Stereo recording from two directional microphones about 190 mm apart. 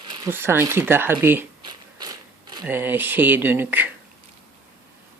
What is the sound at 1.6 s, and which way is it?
Mechanisms, 20° right (ahead or behind).